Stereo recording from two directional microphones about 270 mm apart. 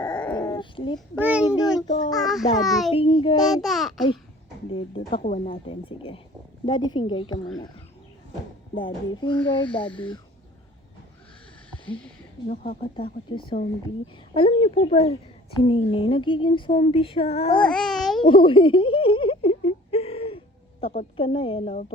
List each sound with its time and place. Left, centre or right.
0.0 s babbling: centre
0.9 s a child's voice: centre
2.9 s speech: centre
3.5 s a child's voice: centre
5.1 s speech: left
8.7 s speech: centre
12.5 s speech: left
17.6 s babbling: centre
18.2 s whimper: centre
20.8 s speech: left